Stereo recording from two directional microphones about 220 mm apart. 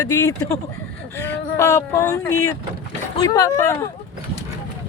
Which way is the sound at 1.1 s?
10° left (ahead or behind).